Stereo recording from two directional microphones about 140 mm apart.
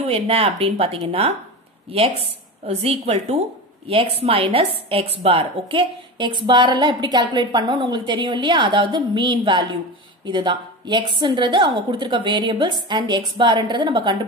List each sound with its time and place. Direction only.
0.0 s a woman's voice: 45° right (ahead or behind)